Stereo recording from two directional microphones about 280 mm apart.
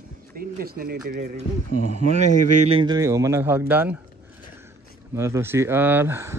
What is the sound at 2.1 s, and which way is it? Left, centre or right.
Speech, right.